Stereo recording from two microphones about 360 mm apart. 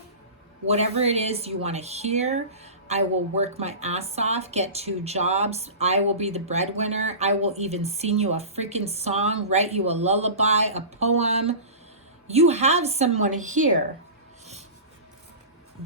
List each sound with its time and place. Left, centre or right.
0.7 s speech: centre